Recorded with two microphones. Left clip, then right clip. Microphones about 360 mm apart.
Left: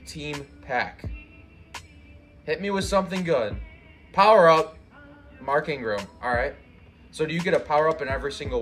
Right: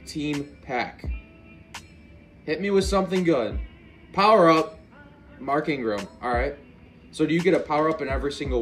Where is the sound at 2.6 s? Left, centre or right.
Centre.